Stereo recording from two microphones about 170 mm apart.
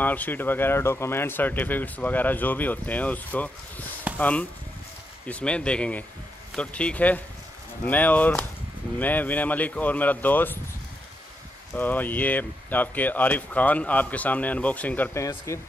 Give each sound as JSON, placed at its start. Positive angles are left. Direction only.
{"t": 0.0, "sound": "speech", "side_deg": 10}
{"t": 11.7, "sound": "speech", "side_deg": 10}